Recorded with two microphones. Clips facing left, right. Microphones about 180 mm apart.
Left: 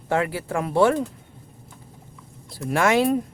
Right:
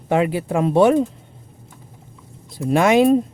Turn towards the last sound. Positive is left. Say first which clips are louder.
# right 6 dB
turn(degrees=-20)  # may be behind; listen again after turning